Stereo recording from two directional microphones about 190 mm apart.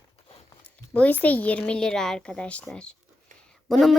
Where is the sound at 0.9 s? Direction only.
10° left (ahead or behind).